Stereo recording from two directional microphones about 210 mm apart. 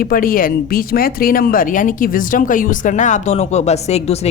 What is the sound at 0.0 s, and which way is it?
Speech, 45° left (ahead or behind).